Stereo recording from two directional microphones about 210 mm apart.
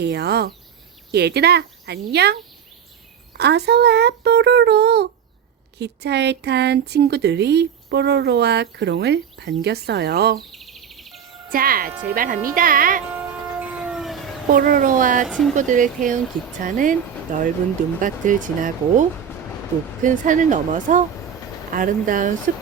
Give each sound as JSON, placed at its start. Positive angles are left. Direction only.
{"t": 0.0, "sound": "speech", "side_deg": -50}
{"t": 10.5, "sound": "a sound", "side_deg": 0}
{"t": 11.5, "sound": "speech", "side_deg": -45}
{"t": 13.6, "sound": "train", "side_deg": -5}
{"t": 14.5, "sound": "speech", "side_deg": -40}
{"t": 15.3, "sound": "speech", "side_deg": 0}
{"t": 15.5, "sound": "speech", "side_deg": -40}
{"t": 20.1, "sound": "speech", "side_deg": -35}